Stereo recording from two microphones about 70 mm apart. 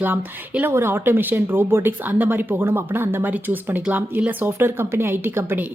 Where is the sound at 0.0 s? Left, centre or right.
Right.